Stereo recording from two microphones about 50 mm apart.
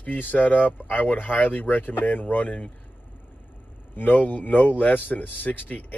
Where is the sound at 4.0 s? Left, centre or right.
Left.